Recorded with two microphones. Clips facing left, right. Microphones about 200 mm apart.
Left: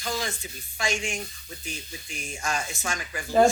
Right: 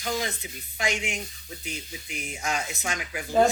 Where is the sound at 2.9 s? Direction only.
10° right (ahead or behind).